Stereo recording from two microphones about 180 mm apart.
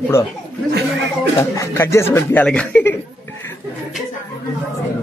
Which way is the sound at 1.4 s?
15° left (ahead or behind).